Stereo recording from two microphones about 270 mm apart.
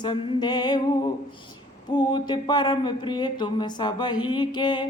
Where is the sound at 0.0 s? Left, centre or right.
Centre.